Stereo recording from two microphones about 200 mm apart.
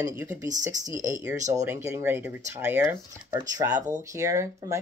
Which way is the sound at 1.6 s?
10° right (ahead or behind).